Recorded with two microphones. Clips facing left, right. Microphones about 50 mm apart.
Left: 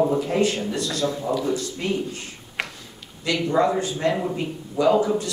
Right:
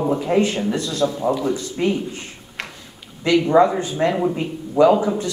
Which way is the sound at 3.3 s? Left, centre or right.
Right.